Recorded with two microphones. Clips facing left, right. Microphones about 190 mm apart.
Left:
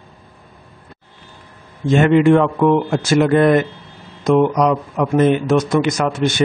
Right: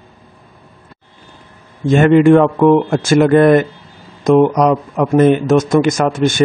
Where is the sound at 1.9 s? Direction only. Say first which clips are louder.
Right 3 dB; 50° right (ahead or behind).